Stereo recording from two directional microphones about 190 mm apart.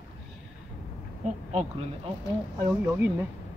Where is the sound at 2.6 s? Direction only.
15° right (ahead or behind).